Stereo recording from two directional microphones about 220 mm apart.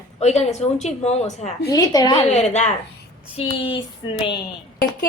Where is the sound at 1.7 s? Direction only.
15° left (ahead or behind).